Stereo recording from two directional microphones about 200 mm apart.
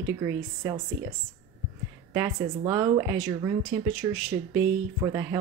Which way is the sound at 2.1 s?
15° right (ahead or behind).